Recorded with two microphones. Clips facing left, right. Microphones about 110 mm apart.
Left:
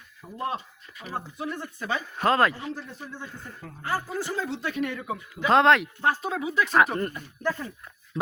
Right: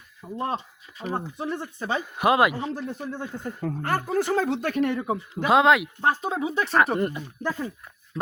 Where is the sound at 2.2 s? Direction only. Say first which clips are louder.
Right 2 dB; 15° right (ahead or behind).